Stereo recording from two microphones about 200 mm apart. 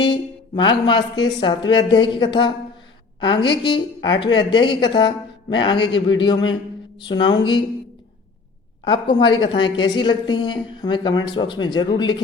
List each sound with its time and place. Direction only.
0.0 s a woman's voice: 25° left (ahead or behind)
8.8 s a woman's voice: 25° left (ahead or behind)